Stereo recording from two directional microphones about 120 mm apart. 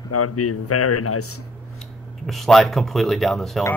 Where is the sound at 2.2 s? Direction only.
Centre (ahead or behind).